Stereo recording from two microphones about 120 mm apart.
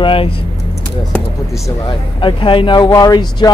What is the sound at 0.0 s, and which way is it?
Speech, 50° left (ahead or behind).